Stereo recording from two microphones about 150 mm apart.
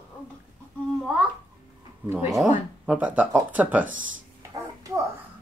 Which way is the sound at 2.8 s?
10° right (ahead or behind).